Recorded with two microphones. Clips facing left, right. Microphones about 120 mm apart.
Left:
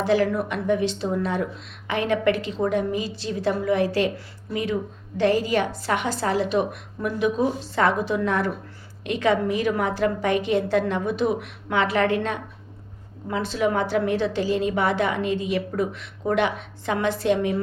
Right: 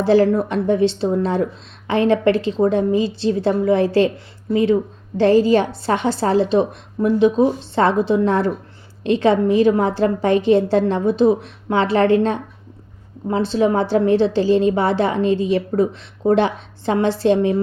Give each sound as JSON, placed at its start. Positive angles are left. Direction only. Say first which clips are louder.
{"t": 0.0, "sound": "a woman's voice", "louder": "right 7 dB", "side_deg": -30}